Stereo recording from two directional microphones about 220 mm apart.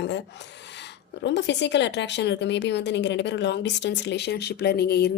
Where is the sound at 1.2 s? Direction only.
50° left (ahead or behind).